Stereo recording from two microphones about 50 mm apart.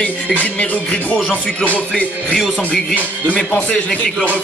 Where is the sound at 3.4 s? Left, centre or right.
Centre.